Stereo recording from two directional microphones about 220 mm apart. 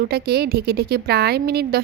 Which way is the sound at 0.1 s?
45° right (ahead or behind).